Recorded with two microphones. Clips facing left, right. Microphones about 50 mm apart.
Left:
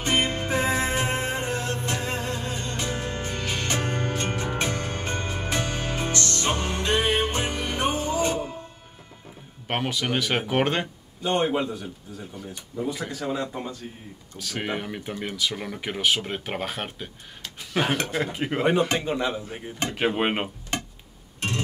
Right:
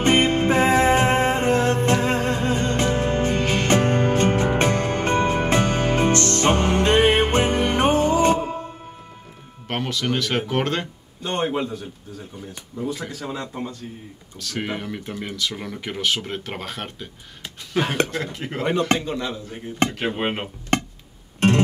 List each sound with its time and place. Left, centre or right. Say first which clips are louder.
0.0 s music: right 7 dB; right
9.7 s speech: right 2 dB; centre
11.4 s speech: right 1 dB; centre
12.7 s speech: right 1 dB; centre
21.4 s music: right 11 dB; right